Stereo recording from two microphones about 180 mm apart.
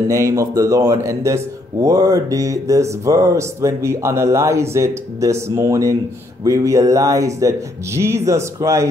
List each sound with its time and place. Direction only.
0.1 s a man's voice: 15° right (ahead or behind)